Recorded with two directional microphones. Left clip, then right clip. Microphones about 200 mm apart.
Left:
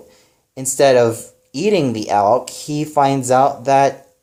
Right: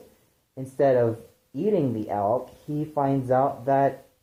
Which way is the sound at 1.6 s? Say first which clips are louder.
Left 8 dB; 45° left (ahead or behind).